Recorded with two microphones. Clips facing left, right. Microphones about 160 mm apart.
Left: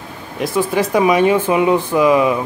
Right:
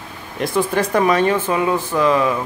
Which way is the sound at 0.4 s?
5° left (ahead or behind).